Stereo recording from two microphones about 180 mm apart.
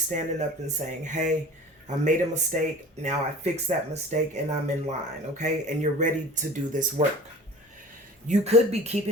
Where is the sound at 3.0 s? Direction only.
40° right (ahead or behind).